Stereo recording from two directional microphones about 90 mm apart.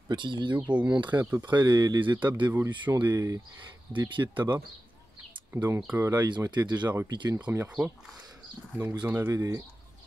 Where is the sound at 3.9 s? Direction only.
60° right (ahead or behind).